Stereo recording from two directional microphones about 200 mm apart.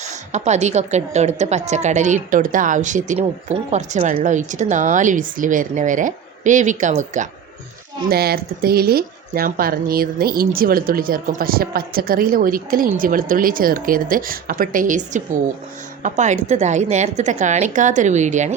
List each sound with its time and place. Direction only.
0.0 s a woman's voice: 35° right (ahead or behind)
8.1 s a woman's voice: 50° right (ahead or behind)